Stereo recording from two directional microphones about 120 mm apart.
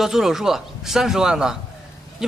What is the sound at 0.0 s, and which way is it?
A man's voice, 5° right (ahead or behind).